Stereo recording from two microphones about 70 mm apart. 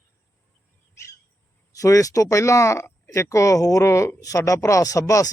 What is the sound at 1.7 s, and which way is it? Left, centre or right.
Speech, left.